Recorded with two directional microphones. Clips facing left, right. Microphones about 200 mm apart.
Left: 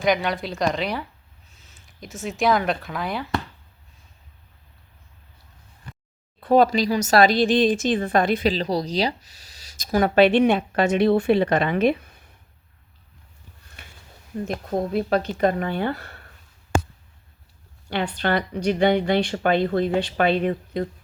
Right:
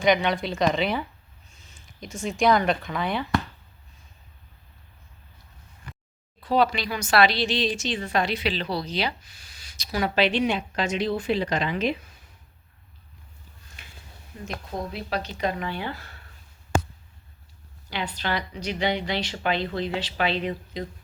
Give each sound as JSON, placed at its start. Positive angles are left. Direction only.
{"t": 0.0, "sound": "speech", "side_deg": 0}
{"t": 6.4, "sound": "a woman's voice", "side_deg": 50}
{"t": 9.8, "sound": "a woman's voice", "side_deg": 50}
{"t": 14.3, "sound": "a woman's voice", "side_deg": 50}
{"t": 17.8, "sound": "a woman's voice", "side_deg": 60}